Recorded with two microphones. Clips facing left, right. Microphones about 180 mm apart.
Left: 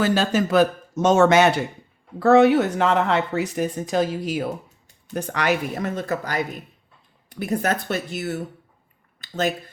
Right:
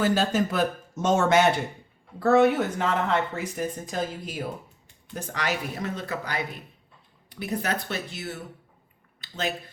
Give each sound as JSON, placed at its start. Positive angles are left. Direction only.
{"t": 0.0, "sound": "speech", "side_deg": 90}
{"t": 5.1, "sound": "speech", "side_deg": 65}